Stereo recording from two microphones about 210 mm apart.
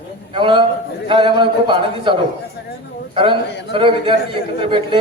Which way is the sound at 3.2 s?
25° right (ahead or behind).